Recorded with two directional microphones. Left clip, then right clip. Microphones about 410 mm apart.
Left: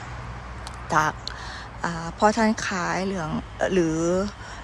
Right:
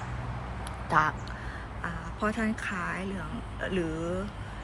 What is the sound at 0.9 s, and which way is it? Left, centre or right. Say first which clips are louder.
Quack: left 3 dB; centre.